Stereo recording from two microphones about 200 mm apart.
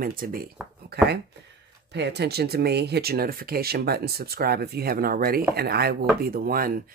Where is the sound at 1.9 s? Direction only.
60° right (ahead or behind).